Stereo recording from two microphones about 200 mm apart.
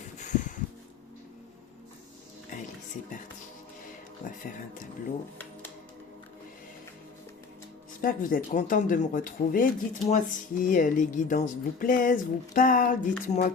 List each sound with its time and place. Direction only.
8.0 s speech: 45° left (ahead or behind)